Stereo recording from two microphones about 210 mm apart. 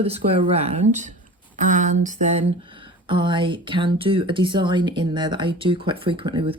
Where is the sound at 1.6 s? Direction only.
35° right (ahead or behind).